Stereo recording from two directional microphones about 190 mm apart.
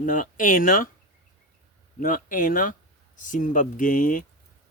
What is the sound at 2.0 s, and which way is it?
A man's voice, 45° left (ahead or behind).